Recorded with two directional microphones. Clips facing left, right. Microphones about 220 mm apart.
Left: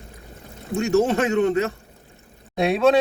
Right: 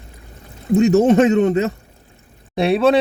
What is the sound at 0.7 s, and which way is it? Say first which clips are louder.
Speech: right 7 dB; 20° right (ahead or behind).